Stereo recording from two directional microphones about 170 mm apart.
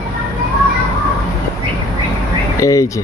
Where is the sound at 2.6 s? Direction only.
20° left (ahead or behind).